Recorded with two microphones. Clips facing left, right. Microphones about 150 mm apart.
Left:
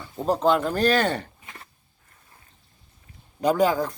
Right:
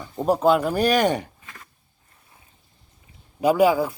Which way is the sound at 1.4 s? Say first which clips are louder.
Left 1 dB; 25° left (ahead or behind).